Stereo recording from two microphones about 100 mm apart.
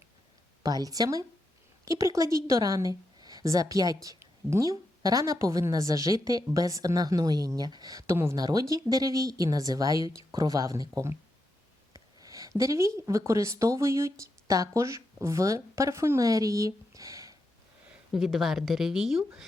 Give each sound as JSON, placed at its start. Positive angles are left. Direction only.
{"t": 0.6, "sound": "a woman's voice", "side_deg": -40}
{"t": 18.1, "sound": "speech", "side_deg": 0}